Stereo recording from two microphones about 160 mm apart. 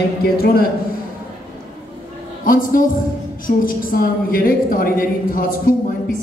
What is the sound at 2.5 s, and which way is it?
A woman's voice, 60° left (ahead or behind).